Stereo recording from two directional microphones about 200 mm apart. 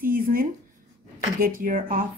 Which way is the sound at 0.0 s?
45° right (ahead or behind).